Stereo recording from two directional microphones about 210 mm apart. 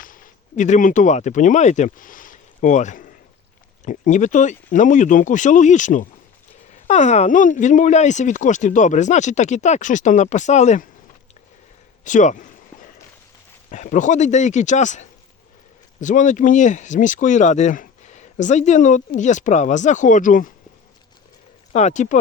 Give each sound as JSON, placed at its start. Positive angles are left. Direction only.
{"t": 0.0, "sound": "speech", "side_deg": 40}
{"t": 12.0, "sound": "speech", "side_deg": 35}
{"t": 13.7, "sound": "speech", "side_deg": 35}
{"t": 21.7, "sound": "speech", "side_deg": 35}